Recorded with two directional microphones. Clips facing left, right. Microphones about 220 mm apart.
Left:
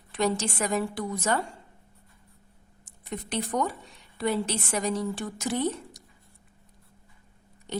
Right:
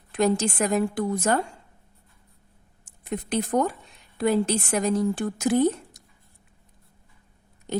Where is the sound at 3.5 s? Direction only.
35° right (ahead or behind).